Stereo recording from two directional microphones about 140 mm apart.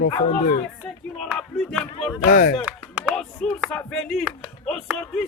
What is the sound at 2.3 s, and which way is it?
Speech, 75° left (ahead or behind).